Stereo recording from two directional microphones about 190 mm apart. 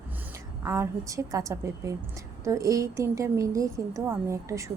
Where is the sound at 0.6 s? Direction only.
15° right (ahead or behind).